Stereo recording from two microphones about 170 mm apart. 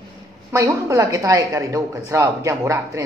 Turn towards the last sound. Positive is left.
turn(degrees=-20)  # may be behind; listen again after turning